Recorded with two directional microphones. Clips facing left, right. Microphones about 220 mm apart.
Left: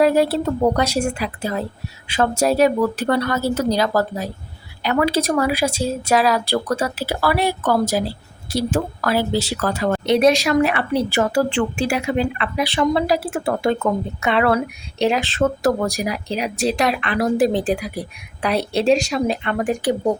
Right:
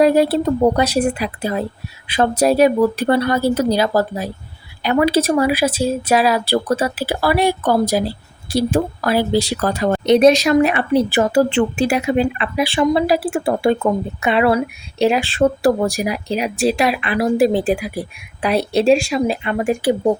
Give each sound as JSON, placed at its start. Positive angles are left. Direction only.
{"t": 0.0, "sound": "speech", "side_deg": -15}